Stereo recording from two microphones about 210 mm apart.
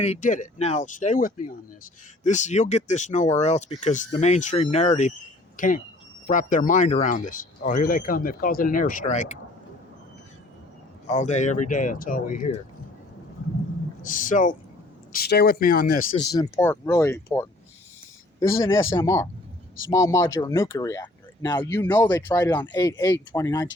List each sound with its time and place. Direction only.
0.0 s speech: 35° left (ahead or behind)
11.1 s speech: 35° left (ahead or behind)
14.0 s speech: 40° left (ahead or behind)
15.1 s speech: 50° left (ahead or behind)
16.2 s speech: 15° left (ahead or behind)